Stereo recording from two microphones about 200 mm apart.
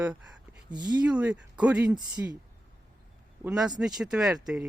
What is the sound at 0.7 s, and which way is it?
Speech, 20° right (ahead or behind).